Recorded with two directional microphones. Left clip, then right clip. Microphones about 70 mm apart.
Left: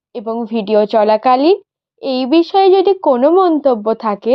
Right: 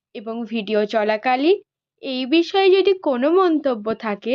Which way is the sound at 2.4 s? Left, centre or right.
Left.